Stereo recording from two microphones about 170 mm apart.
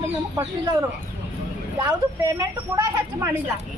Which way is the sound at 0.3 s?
20° right (ahead or behind).